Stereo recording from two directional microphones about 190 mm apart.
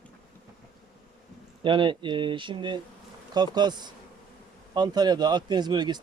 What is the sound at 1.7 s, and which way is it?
Speech, 25° right (ahead or behind).